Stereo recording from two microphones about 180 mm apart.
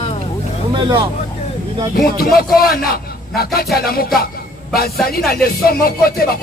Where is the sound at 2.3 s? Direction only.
55° left (ahead or behind).